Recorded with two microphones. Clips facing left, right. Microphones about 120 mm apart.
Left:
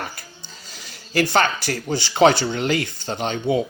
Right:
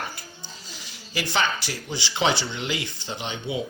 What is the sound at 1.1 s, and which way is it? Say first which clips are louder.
A man's voice: left 7 dB; 50° left (ahead or behind).